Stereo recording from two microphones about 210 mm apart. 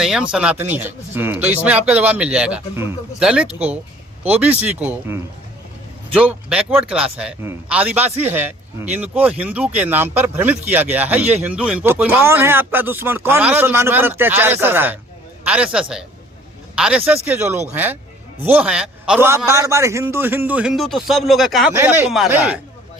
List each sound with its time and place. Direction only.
0.0 s a man's voice: centre (ahead or behind)
21.7 s speech: 10° right (ahead or behind)